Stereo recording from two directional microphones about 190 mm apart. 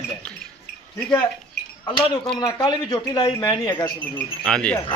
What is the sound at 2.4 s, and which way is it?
Speech, 20° left (ahead or behind).